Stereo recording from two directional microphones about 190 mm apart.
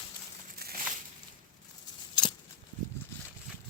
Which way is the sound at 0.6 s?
55° right (ahead or behind).